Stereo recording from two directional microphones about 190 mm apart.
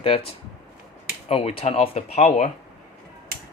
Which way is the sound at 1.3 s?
30° left (ahead or behind).